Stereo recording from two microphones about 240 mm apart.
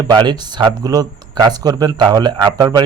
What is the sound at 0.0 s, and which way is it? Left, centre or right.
Speech, centre.